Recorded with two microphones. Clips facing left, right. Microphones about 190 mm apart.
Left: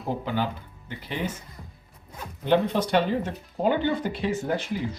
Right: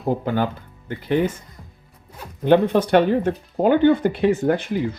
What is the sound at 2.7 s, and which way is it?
Speech, 55° right (ahead or behind).